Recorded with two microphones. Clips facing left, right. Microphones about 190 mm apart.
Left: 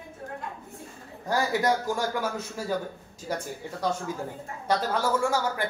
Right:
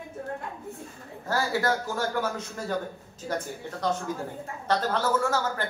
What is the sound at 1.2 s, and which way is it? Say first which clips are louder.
Speech: left 2 dB; 15° left (ahead or behind).